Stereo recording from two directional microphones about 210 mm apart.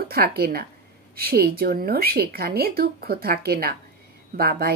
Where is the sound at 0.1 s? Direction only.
45° right (ahead or behind).